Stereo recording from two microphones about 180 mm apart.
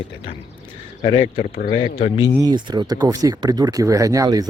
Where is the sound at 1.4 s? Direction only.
55° left (ahead or behind).